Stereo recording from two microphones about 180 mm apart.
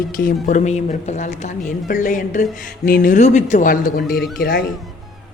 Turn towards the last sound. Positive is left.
turn(degrees=55)  # may be behind; listen again after turning